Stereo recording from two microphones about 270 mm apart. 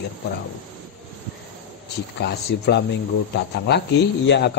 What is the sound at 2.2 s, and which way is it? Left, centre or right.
Speech, left.